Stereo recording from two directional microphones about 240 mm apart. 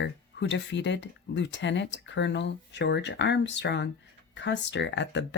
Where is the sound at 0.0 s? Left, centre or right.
Left.